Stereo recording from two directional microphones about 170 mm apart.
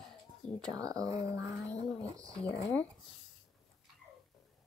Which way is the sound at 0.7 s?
20° right (ahead or behind).